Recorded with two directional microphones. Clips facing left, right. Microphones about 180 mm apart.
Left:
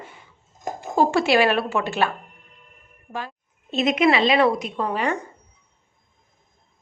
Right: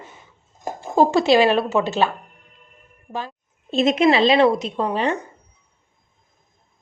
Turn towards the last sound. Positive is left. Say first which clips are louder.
# right 2 dB
turn(degrees=-25)  # may be behind; listen again after turning